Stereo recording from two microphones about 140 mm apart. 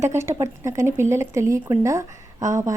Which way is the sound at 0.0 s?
20° right (ahead or behind).